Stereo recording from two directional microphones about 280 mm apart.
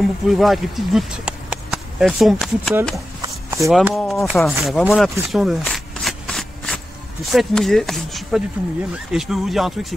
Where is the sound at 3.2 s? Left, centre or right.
Centre.